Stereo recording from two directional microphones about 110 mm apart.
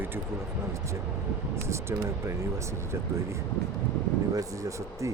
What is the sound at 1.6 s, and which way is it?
Speech, 25° right (ahead or behind).